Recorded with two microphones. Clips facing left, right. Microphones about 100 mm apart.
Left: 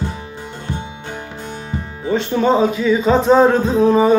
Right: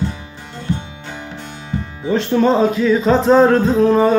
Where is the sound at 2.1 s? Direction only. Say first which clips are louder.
Right 1 dB; centre (ahead or behind).